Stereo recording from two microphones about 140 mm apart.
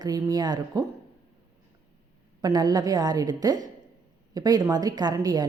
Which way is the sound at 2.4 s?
25° right (ahead or behind).